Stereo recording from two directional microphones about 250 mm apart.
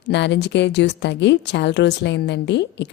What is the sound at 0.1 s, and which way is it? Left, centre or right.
A woman's voice, left.